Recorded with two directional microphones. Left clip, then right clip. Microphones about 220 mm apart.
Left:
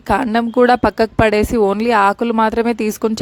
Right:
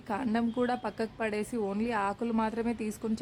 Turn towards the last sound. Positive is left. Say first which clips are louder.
# left 17 dB
turn(degrees=40)  # may be behind; listen again after turning